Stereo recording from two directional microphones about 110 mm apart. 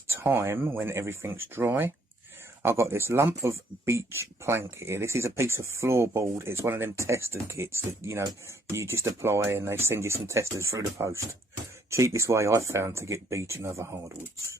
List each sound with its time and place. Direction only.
0.1 s speech: 25° right (ahead or behind)